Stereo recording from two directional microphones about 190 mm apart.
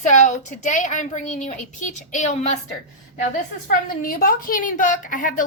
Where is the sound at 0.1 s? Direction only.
40° left (ahead or behind).